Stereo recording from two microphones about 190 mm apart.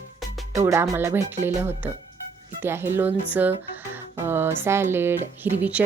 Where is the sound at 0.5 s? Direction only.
15° right (ahead or behind).